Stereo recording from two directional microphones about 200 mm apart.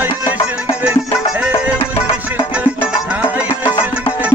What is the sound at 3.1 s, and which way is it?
Music, 5° right (ahead or behind).